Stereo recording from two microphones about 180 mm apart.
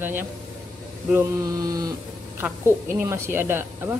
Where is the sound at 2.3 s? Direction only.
15° right (ahead or behind).